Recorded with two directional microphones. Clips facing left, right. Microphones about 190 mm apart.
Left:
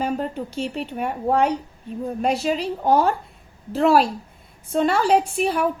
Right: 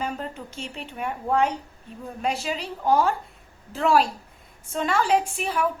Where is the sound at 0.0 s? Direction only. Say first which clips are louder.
Left 6 dB; 35° left (ahead or behind).